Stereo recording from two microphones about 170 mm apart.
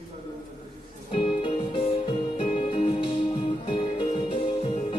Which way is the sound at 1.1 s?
35° left (ahead or behind).